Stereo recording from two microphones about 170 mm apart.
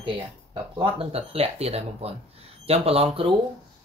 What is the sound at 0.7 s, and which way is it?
Speech, 35° right (ahead or behind).